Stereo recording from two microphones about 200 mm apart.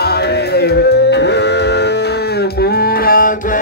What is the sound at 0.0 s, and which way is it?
Music, 55° left (ahead or behind).